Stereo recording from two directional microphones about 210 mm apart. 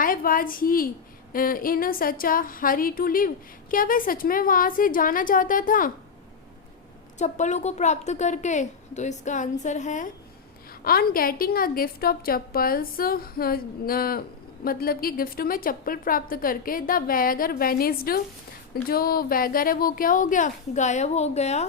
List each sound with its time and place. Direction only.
0.0 s a woman's voice: 40° left (ahead or behind)
7.2 s a woman's voice: 35° left (ahead or behind)